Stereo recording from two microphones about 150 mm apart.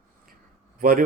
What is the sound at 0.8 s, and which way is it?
Speech, 70° right (ahead or behind).